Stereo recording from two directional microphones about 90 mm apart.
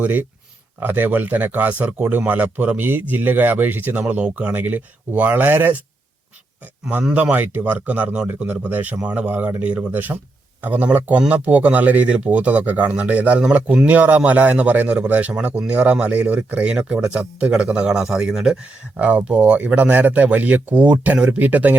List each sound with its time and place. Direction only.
0.0 s speech: 15° right (ahead or behind)
7.0 s speech: 15° right (ahead or behind)